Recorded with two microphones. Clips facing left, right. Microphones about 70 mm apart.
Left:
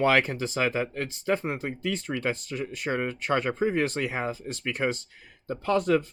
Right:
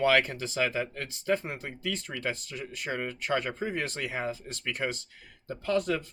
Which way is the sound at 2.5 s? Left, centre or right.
Left.